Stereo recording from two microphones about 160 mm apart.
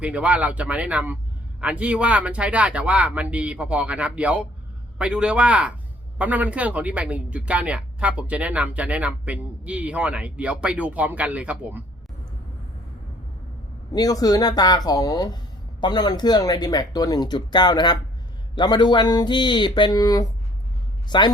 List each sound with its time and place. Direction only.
0.0 s speech: 10° right (ahead or behind)
13.9 s speech: 25° left (ahead or behind)